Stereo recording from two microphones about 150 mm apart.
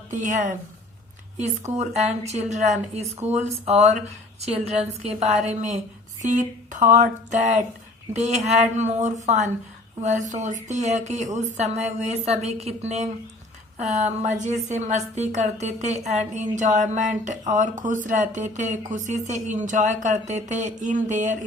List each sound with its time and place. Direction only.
0.1 s a woman's voice: 55° right (ahead or behind)
6.2 s a woman's voice: 55° right (ahead or behind)